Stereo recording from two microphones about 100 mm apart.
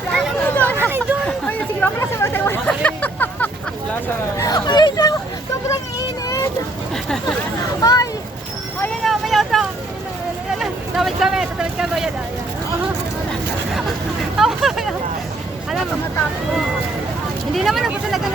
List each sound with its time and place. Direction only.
0.4 s hubbub: 15° left (ahead or behind)
0.8 s chatter: 20° right (ahead or behind)
1.5 s chatter: 15° left (ahead or behind)
2.6 s vehicle: 15° left (ahead or behind)
4.4 s hubbub: 40° left (ahead or behind)
7.8 s a sound: 35° left (ahead or behind)
9.0 s vehicle: centre (ahead or behind)
10.6 s a sound: 5° right (ahead or behind)
14.3 s hubbub: 5° right (ahead or behind)
17.5 s vehicle: centre (ahead or behind)